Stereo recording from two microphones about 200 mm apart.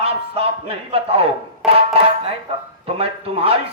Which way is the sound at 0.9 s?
30° right (ahead or behind).